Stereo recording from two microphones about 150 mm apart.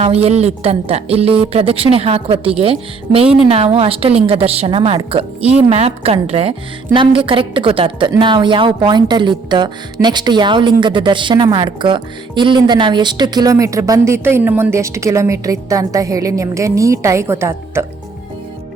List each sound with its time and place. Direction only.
0.0 s a woman's voice: 45° right (ahead or behind); by 17.8 s 15° right (ahead or behind)